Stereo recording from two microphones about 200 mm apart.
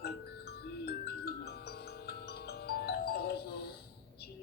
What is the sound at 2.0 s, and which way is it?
Music, 55° left (ahead or behind).